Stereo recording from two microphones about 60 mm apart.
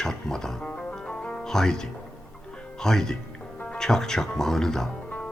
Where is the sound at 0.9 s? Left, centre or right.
Centre.